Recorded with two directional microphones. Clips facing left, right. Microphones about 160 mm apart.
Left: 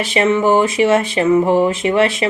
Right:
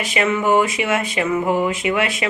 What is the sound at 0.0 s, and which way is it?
A woman's voice, 30° left (ahead or behind).